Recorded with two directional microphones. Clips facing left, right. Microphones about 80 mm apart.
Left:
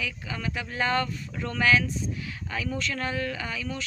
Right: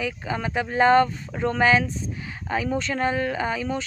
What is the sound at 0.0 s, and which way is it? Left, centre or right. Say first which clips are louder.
Speech: right 6 dB; right.